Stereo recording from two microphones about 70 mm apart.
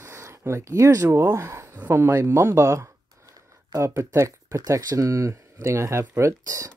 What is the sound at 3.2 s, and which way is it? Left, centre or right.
Speech, right.